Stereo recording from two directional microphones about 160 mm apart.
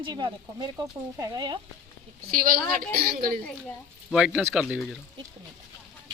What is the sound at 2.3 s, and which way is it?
A woman's voice, 60° right (ahead or behind).